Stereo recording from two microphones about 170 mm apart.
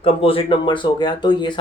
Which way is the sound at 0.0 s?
35° left (ahead or behind).